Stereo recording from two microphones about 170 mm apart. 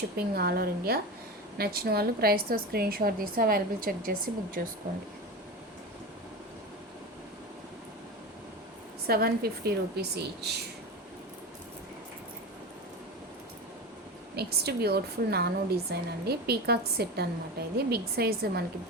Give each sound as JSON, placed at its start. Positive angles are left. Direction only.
{"t": 0.2, "sound": "a woman's voice", "side_deg": -65}
{"t": 9.0, "sound": "a woman's voice", "side_deg": -65}
{"t": 14.3, "sound": "a woman's voice", "side_deg": -70}